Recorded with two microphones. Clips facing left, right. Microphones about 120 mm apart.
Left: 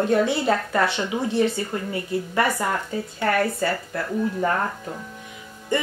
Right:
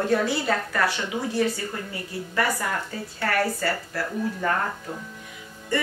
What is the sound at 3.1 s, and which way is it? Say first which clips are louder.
Speech: left 2 dB; 25° left (ahead or behind).